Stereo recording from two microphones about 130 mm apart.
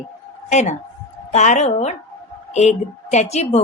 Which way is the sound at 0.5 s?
65° left (ahead or behind).